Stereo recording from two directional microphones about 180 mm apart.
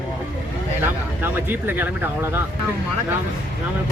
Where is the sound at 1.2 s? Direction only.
10° right (ahead or behind).